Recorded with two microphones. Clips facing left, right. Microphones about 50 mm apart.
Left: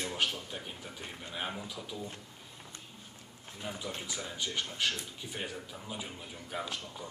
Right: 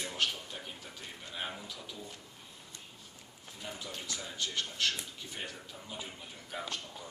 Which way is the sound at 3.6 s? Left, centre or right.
Centre.